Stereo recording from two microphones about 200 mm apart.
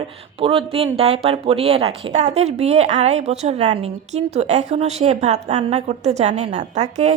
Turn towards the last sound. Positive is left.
turn(degrees=-35)  # may be behind; listen again after turning